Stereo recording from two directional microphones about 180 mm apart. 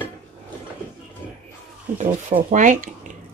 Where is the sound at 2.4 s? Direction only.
45° right (ahead or behind).